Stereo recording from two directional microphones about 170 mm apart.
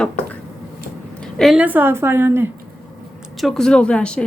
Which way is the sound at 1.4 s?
5° right (ahead or behind).